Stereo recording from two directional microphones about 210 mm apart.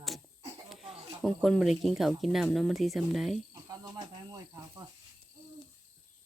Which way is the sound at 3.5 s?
20° right (ahead or behind).